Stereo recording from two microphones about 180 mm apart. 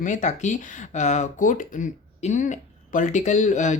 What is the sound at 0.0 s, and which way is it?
Speech, 45° left (ahead or behind).